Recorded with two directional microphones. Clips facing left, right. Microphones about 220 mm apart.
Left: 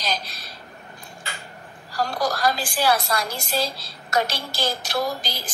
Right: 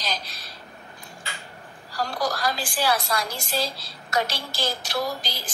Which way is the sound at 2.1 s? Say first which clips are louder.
Left 3 dB; 45° left (ahead or behind).